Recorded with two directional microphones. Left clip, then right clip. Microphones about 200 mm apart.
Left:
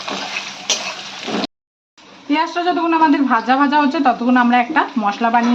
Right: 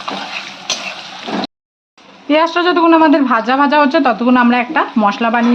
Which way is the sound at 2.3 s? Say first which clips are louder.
Right 5 dB; 40° right (ahead or behind).